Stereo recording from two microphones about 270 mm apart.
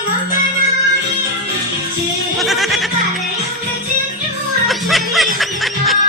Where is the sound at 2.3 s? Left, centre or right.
Centre.